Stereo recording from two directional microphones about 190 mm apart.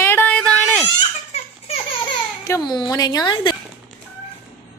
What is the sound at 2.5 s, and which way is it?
Speech, 20° left (ahead or behind).